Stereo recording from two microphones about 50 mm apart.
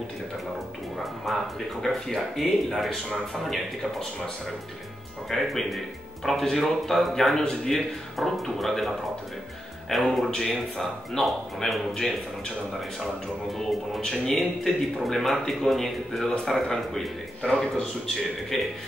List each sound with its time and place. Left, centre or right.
0.9 s a man's voice: centre
5.3 s speech: centre
10.3 s a man's voice: centre
10.8 s speech: centre
13.6 s a man's voice: centre